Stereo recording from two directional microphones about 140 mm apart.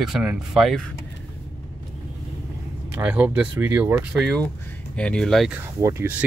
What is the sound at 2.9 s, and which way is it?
Speech, 10° right (ahead or behind).